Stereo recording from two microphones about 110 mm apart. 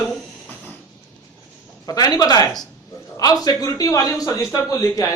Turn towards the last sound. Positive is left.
turn(degrees=30)  # may be behind; listen again after turning